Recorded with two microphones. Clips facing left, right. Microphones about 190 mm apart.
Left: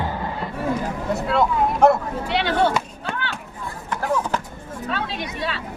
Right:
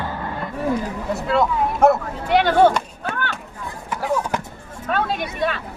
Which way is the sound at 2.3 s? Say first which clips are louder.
Right 6 dB; 50° right (ahead or behind).